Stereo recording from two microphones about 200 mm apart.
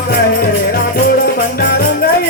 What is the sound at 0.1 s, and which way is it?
Music, 50° left (ahead or behind).